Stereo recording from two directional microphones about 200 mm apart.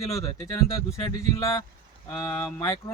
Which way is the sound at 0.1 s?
15° left (ahead or behind).